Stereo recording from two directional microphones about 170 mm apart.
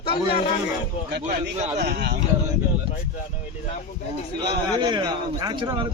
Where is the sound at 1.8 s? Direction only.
70° right (ahead or behind).